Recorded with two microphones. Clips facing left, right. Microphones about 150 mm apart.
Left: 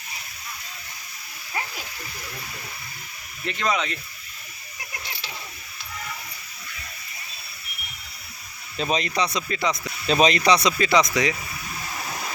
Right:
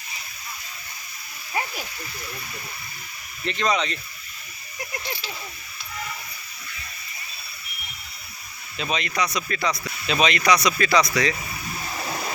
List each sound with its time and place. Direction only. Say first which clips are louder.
3.4 s speech: right 2 dB; 5° left (ahead or behind)
8.8 s speech: left 2 dB; 35° left (ahead or behind); by 9.7 s 20° left (ahead or behind)
10.1 s speech: left 2 dB; 40° left (ahead or behind); by 11.3 s 20° left (ahead or behind)